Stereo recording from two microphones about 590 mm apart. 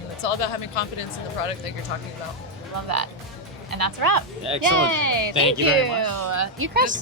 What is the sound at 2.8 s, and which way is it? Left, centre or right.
A woman's voice, right.